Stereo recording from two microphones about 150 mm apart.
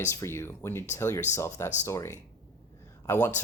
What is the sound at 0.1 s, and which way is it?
Speech, 15° left (ahead or behind).